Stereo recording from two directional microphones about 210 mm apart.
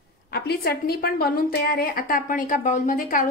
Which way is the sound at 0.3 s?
50° left (ahead or behind).